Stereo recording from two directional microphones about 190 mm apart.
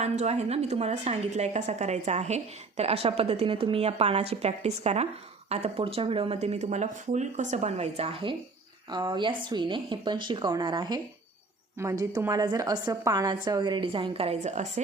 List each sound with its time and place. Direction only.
0.0 s a woman's voice: 35° right (ahead or behind)